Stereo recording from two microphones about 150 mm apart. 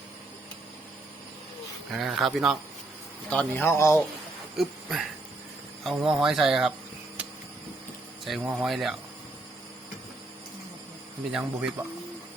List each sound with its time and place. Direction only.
1.9 s speech: centre (ahead or behind)
3.2 s speech: 10° left (ahead or behind)
4.5 s speech: centre (ahead or behind)
7.2 s a sound: 10° right (ahead or behind)
8.3 s speech: centre (ahead or behind)
11.3 s speech: 5° right (ahead or behind)